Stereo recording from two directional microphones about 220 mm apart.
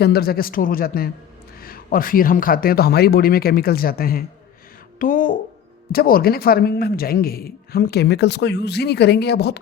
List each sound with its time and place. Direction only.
0.0 s speech: 45° left (ahead or behind)